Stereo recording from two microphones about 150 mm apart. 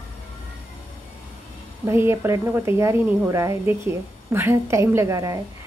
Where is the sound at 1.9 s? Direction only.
15° right (ahead or behind).